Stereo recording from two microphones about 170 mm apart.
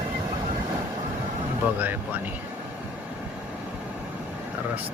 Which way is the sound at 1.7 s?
10° right (ahead or behind).